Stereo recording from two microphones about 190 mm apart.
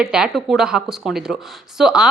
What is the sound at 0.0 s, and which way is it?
A woman's voice, 5° right (ahead or behind).